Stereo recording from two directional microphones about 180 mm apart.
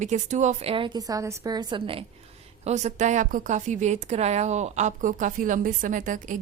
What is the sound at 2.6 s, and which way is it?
A woman's voice, 40° right (ahead or behind).